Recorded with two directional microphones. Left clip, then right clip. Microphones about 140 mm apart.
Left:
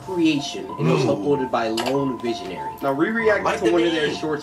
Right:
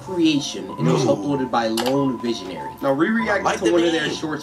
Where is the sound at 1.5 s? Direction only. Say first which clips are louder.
Right 2 dB; 30° right (ahead or behind).